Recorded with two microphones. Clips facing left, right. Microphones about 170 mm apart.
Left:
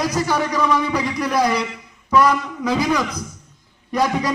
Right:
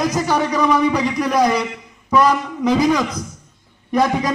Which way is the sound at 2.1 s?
20° right (ahead or behind).